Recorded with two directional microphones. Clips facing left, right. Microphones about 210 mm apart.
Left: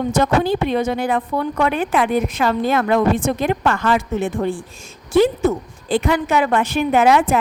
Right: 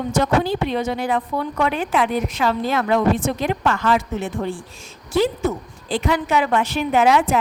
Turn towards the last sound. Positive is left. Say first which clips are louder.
# left 2 dB
turn(degrees=50)  # may be behind; listen again after turning